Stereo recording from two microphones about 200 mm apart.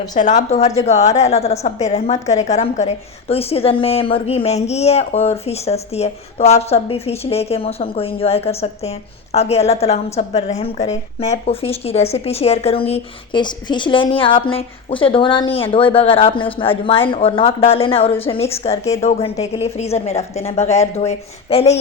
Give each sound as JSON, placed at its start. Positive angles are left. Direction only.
{"t": 0.1, "sound": "a woman's voice", "side_deg": 40}